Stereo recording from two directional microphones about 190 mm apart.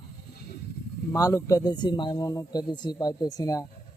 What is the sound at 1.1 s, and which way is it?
Speech, 15° left (ahead or behind).